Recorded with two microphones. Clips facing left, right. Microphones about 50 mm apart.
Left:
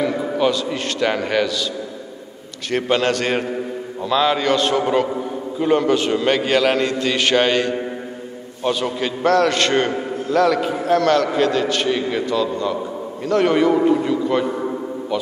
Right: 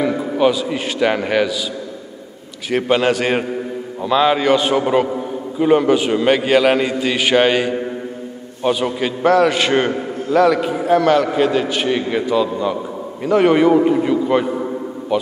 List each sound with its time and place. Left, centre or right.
0.0 s a man's voice: centre
2.7 s a man's voice: centre